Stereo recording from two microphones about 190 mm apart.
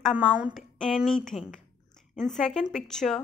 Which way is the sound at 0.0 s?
5° right (ahead or behind).